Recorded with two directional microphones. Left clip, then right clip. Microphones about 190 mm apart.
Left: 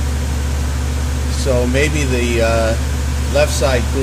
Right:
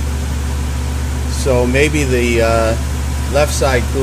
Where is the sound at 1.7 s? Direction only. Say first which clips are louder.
Right 3 dB; 35° right (ahead or behind).